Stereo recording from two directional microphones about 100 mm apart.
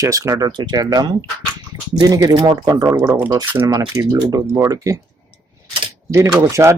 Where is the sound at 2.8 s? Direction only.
30° right (ahead or behind).